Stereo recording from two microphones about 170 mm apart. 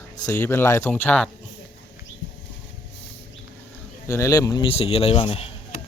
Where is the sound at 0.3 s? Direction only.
10° left (ahead or behind).